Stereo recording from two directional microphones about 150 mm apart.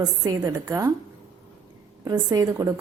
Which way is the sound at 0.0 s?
30° right (ahead or behind).